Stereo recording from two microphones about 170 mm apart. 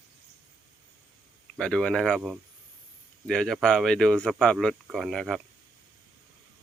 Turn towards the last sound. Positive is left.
turn(degrees=0)  # may be behind; listen again after turning